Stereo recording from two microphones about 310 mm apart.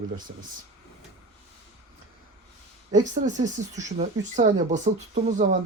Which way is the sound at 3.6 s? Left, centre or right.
Right.